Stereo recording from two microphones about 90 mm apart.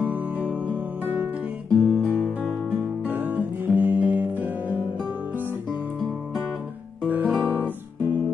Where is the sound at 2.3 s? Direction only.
15° right (ahead or behind).